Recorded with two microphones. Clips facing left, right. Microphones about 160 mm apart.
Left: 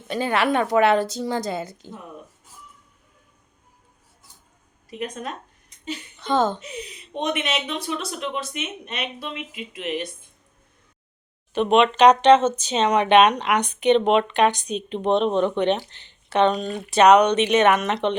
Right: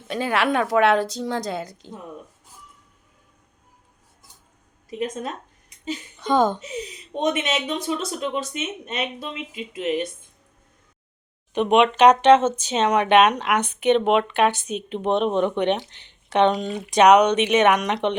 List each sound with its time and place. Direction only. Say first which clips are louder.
0.1 s a woman's voice: left 1 dB; centre (ahead or behind)
6.1 s speech: right 2 dB; 10° right (ahead or behind)
7.3 s a woman's voice: right 3 dB; 25° right (ahead or behind)
11.5 s speech: even; 15° right (ahead or behind)